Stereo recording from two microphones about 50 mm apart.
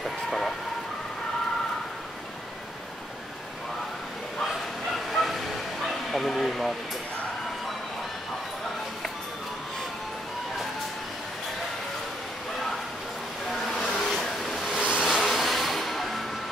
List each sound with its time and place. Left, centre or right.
5.1 s a sound: centre
13.5 s vehicle: centre
14.8 s vehicle: right
15.1 s music: centre